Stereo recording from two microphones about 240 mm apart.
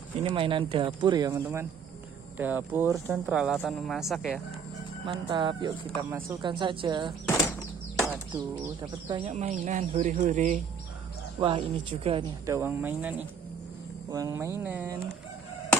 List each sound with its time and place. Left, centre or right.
0.2 s speech: right; by 4.4 s centre
5.0 s speech: right
9.1 s speech: right
11.3 s speech: right
14.1 s a sound: centre